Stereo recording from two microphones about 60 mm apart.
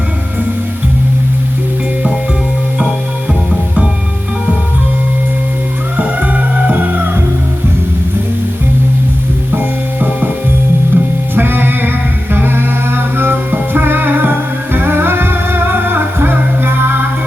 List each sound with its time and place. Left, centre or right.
6.0 s music: right
9.6 s music: right